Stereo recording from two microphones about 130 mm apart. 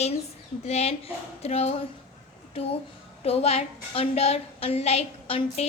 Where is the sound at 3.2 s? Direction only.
50° left (ahead or behind).